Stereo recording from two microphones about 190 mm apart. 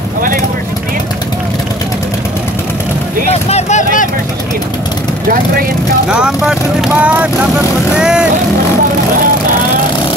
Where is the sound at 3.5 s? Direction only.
40° left (ahead or behind).